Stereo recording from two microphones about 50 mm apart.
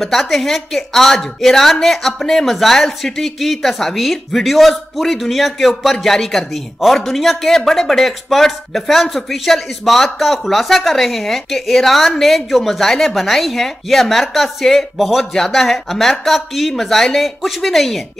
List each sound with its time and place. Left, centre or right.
0.0 s a woman's voice: centre